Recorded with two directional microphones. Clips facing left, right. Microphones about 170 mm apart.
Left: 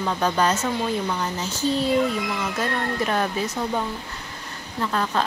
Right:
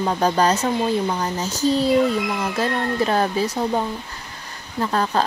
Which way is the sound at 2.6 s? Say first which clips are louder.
Right 5 dB; 35° right (ahead or behind).